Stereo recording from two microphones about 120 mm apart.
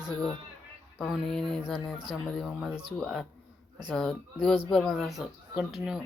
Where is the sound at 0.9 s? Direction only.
Centre (ahead or behind).